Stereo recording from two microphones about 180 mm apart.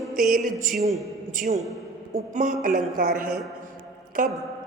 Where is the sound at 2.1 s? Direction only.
45° right (ahead or behind).